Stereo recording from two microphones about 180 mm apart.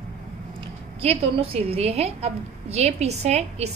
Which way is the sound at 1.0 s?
35° right (ahead or behind).